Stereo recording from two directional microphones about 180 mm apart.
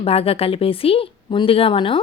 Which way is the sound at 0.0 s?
35° left (ahead or behind).